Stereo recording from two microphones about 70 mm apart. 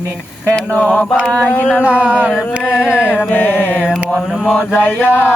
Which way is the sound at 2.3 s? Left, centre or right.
Left.